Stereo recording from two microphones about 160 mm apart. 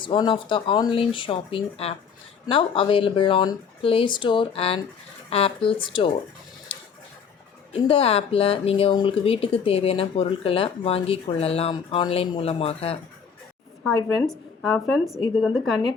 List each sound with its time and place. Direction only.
0.0 s speech: 30° left (ahead or behind)
7.7 s speech: 35° left (ahead or behind)
13.8 s a woman's voice: centre (ahead or behind)